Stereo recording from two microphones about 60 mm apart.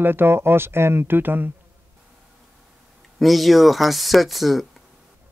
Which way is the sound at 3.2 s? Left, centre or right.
Centre.